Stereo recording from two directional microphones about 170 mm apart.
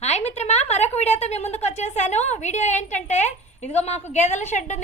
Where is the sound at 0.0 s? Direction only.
40° left (ahead or behind).